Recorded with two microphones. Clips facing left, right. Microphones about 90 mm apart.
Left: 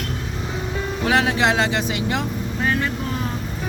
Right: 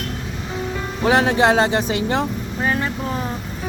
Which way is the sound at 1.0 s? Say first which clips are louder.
Right 4 dB; 30° right (ahead or behind).